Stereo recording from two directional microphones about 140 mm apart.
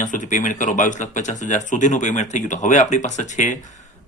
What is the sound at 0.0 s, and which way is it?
Speech, 65° left (ahead or behind).